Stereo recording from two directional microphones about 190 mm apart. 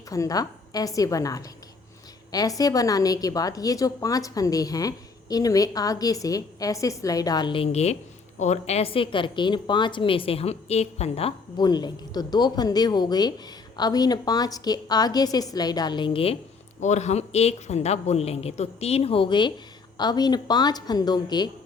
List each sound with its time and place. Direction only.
0.1 s a woman's voice: 20° left (ahead or behind)